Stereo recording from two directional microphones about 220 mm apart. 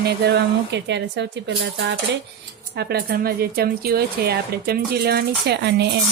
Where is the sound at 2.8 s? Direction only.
45° right (ahead or behind).